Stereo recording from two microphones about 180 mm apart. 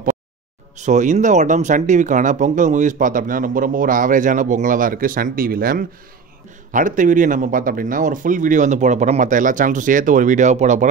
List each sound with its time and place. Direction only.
0.7 s speech: 40° right (ahead or behind)